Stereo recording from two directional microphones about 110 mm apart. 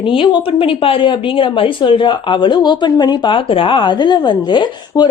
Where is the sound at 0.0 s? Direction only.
50° left (ahead or behind).